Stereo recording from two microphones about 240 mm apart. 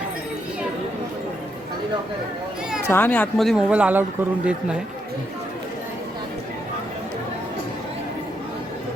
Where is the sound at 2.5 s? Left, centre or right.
Centre.